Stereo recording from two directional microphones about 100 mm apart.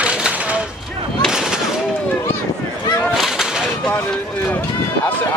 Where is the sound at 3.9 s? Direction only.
15° left (ahead or behind).